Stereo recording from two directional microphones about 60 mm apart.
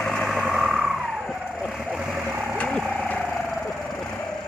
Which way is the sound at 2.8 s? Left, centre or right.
Centre.